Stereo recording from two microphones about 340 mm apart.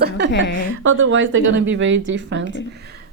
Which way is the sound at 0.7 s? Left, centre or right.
Right.